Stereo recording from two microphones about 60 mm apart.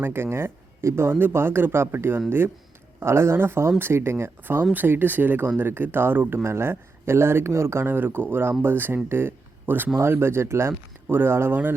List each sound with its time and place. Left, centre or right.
0.0 s speech: right